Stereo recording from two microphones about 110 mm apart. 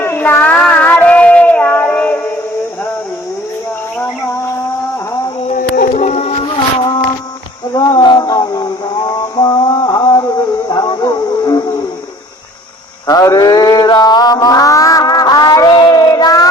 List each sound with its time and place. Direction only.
0.0 s child singing: 20° left (ahead or behind)
5.5 s music: 90° left
7.9 s mantra: 35° left (ahead or behind)
13.1 s mantra: 35° left (ahead or behind)